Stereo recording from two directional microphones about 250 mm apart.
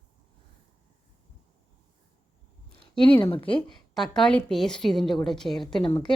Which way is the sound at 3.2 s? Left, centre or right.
Left.